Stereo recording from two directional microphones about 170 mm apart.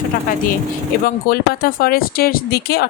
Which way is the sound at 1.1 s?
60° left (ahead or behind).